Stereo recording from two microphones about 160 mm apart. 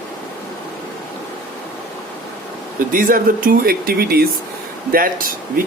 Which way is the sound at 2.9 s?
60° right (ahead or behind).